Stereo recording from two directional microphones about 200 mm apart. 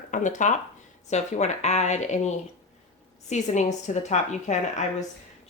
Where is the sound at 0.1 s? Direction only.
40° left (ahead or behind).